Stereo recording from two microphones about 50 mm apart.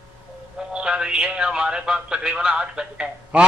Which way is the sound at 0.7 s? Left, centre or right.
Centre.